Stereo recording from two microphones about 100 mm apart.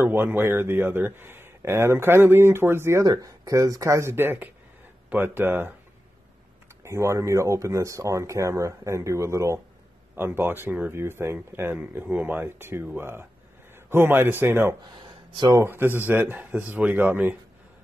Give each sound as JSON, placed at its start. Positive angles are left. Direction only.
{"t": 0.0, "sound": "speech", "side_deg": -20}
{"t": 6.8, "sound": "speech", "side_deg": -30}
{"t": 14.9, "sound": "a sound", "side_deg": -50}
{"t": 15.5, "sound": "speech", "side_deg": -25}